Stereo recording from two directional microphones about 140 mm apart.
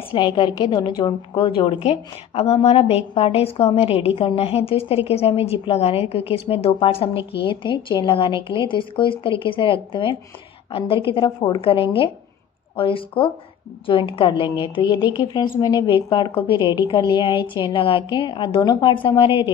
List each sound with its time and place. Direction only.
0.1 s a woman's voice: 35° left (ahead or behind)